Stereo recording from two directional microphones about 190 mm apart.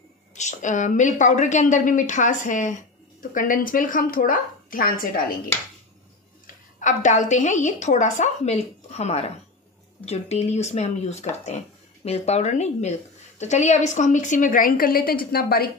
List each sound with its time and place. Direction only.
0.3 s a woman's voice: 40° left (ahead or behind)
6.4 s a woman's voice: 40° left (ahead or behind)